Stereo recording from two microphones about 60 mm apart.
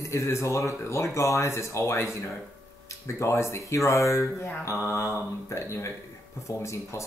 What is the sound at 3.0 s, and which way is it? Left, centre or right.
Speech, left.